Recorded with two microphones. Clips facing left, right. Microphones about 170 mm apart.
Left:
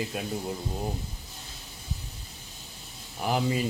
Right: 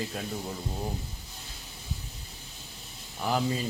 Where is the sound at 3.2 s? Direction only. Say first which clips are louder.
Left 1 dB; 15° left (ahead or behind).